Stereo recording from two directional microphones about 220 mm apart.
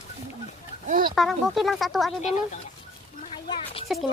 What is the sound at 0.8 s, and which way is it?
Speech, 35° right (ahead or behind).